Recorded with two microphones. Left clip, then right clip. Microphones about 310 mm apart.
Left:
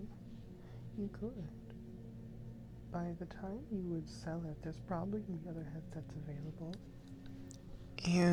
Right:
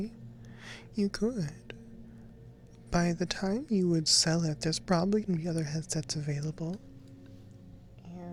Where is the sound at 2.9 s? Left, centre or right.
Right.